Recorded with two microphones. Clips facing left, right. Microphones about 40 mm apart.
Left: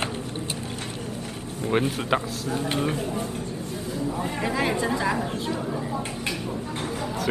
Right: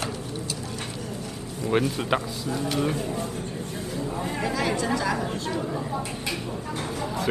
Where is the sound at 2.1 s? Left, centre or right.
Centre.